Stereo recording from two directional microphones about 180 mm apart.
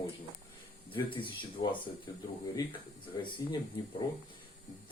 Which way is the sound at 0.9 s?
30° left (ahead or behind).